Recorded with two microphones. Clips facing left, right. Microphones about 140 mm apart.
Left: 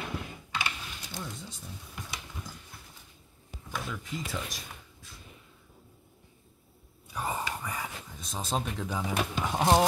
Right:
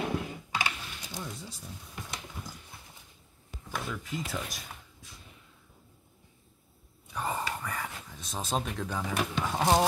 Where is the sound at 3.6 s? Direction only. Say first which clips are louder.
Right 1 dB; centre (ahead or behind).